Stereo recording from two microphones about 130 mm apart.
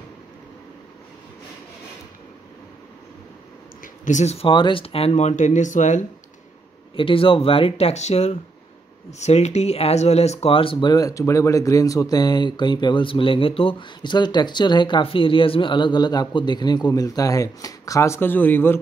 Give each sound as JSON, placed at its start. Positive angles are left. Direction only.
{"t": 3.8, "sound": "speech", "side_deg": 75}
{"t": 7.0, "sound": "speech", "side_deg": 45}